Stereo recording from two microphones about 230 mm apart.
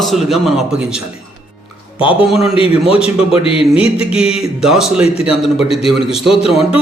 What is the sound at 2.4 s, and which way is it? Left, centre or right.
Speech, left.